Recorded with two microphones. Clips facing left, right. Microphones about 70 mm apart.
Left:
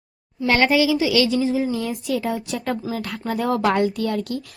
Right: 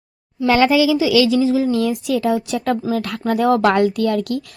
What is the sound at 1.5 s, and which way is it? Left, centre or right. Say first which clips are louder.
Speech: right 5 dB; right.